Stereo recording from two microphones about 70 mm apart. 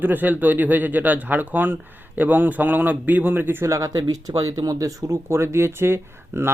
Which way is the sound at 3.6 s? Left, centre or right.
Right.